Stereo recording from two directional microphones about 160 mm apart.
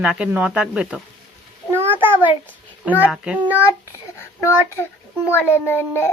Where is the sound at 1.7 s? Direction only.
15° right (ahead or behind).